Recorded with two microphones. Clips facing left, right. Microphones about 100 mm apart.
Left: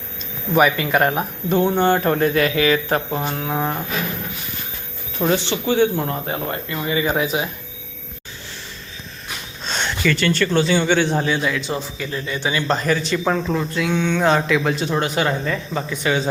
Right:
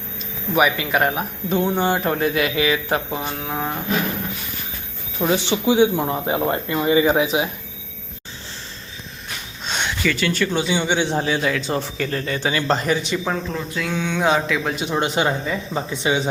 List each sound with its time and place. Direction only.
0.5 s speech: 5° right (ahead or behind)
5.1 s speech: centre (ahead or behind)
5.4 s speech: 15° right (ahead or behind)
9.6 s a sound: 10° right (ahead or behind)
10.0 s a man's voice: 5° right (ahead or behind); by 11.8 s 40° right (ahead or behind)
11.8 s speech: 65° right (ahead or behind)
12.5 s speech: 30° right (ahead or behind)
13.2 s speech: 5° left (ahead or behind)
14.8 s speech: 20° right (ahead or behind)